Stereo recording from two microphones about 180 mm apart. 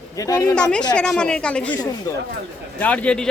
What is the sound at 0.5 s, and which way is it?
Speech, 5° left (ahead or behind).